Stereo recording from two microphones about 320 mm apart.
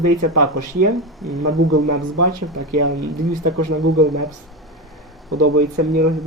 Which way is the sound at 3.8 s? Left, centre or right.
Centre.